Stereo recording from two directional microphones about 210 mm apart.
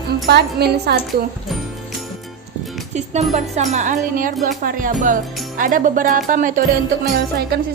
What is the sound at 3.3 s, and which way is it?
Music, 35° right (ahead or behind).